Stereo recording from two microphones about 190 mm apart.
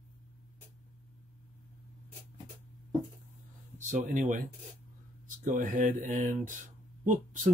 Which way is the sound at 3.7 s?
40° right (ahead or behind).